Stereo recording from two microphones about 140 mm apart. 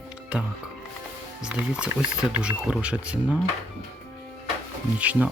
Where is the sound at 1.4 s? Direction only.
5° right (ahead or behind).